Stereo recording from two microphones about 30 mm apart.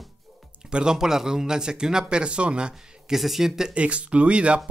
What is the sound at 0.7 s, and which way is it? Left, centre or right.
Speech, right.